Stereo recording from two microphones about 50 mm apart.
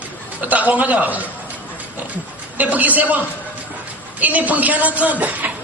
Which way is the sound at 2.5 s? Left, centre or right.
Right.